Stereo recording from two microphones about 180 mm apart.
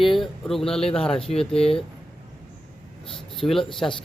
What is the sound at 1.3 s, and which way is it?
Speech, 30° left (ahead or behind).